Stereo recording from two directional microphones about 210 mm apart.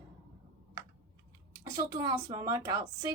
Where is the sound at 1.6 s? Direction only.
15° right (ahead or behind).